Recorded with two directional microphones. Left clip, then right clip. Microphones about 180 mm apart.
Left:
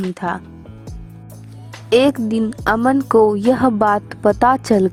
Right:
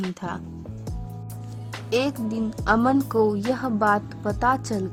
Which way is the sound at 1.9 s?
45° left (ahead or behind).